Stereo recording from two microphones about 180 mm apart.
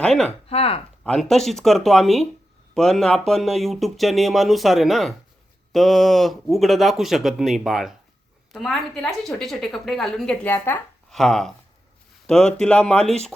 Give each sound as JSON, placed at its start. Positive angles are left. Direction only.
{"t": 0.0, "sound": "speech", "side_deg": 5}
{"t": 0.4, "sound": "speech", "side_deg": 30}
{"t": 1.0, "sound": "speech", "side_deg": 5}